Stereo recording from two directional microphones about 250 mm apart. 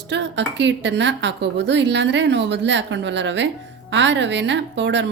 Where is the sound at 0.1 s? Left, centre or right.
Right.